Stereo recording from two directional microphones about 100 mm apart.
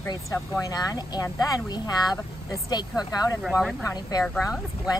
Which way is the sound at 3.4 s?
Centre (ahead or behind).